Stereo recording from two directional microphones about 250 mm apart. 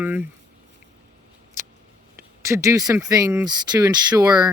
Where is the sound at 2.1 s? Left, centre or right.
Centre.